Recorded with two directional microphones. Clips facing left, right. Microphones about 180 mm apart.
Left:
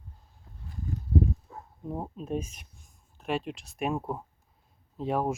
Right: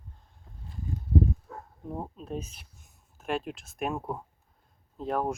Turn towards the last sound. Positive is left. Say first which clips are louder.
# left 1 dB
turn(degrees=0)  # may be behind; listen again after turning